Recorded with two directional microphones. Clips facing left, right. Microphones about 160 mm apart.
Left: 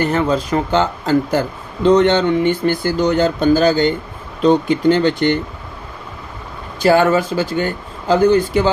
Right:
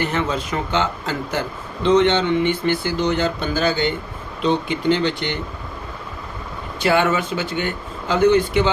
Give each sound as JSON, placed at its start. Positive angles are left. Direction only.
{"t": 0.0, "sound": "speech", "side_deg": 40}
{"t": 6.7, "sound": "speech", "side_deg": 40}